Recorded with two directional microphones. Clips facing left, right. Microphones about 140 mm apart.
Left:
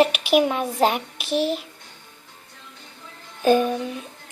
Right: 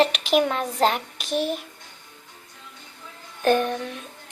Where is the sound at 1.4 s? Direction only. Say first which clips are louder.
Left 3 dB; 50° right (ahead or behind).